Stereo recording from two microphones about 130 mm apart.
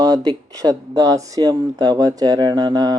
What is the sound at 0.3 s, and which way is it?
Speech, 30° right (ahead or behind).